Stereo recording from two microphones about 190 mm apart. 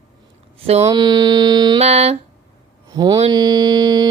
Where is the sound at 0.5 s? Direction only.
30° right (ahead or behind).